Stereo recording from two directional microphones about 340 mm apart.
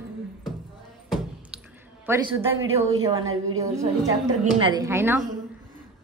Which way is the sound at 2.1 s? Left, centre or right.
Centre.